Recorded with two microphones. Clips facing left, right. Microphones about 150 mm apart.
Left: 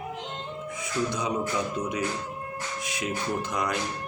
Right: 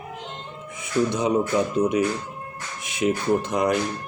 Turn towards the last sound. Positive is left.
turn(degrees=-25)  # may be behind; listen again after turning